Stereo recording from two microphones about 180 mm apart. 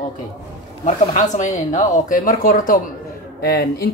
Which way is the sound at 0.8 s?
40° left (ahead or behind).